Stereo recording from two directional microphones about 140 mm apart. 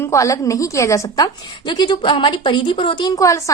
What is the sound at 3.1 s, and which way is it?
Speech, 25° left (ahead or behind).